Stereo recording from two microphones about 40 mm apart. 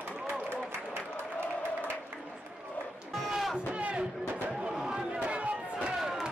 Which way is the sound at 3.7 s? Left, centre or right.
Right.